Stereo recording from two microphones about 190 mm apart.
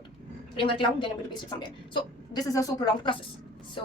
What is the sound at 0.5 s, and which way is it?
A woman's voice, 25° left (ahead or behind).